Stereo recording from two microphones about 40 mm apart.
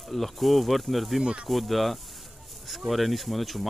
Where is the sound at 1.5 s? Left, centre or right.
Centre.